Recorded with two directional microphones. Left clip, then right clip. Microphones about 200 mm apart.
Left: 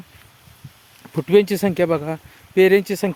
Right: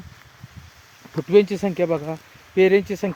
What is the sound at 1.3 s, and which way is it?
Speech, 35° left (ahead or behind).